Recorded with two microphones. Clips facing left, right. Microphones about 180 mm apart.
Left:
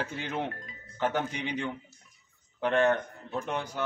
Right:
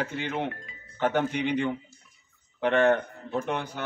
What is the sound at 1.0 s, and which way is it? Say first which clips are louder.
Speech: right 5 dB; 60° right (ahead or behind).